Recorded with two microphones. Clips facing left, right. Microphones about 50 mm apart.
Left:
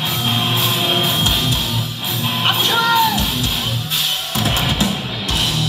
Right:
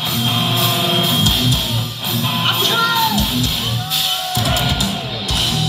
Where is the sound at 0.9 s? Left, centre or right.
Centre.